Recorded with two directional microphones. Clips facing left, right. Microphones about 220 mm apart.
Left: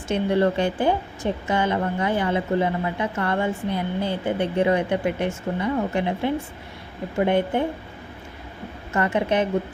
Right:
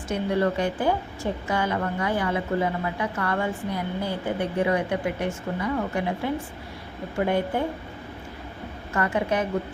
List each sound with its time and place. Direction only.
0.1 s a woman's voice: 25° left (ahead or behind)
9.0 s a woman's voice: 25° left (ahead or behind)